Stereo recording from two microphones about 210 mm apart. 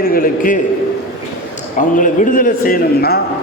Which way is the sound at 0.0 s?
45° left (ahead or behind).